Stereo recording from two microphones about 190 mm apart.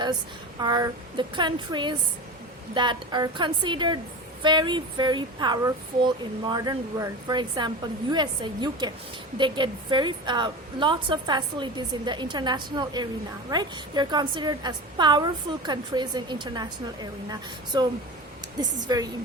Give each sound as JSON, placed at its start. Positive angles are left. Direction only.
{"t": 0.6, "sound": "a woman's voice", "side_deg": -20}